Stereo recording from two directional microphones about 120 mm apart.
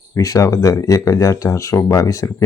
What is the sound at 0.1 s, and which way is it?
Speech, 30° left (ahead or behind).